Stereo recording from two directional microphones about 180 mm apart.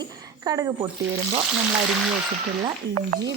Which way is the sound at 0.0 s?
20° right (ahead or behind).